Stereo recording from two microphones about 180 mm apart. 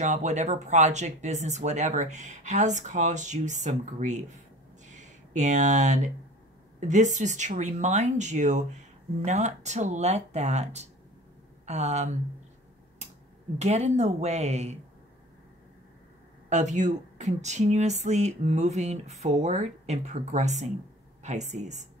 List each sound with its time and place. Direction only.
0.0 s speech: 40° right (ahead or behind)
4.8 s a sound: 40° right (ahead or behind)
6.8 s speech: 40° right (ahead or behind)
13.6 s speech: 40° right (ahead or behind)
16.4 s speech: 40° right (ahead or behind)